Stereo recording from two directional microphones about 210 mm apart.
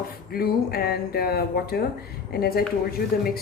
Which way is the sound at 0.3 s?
45° left (ahead or behind).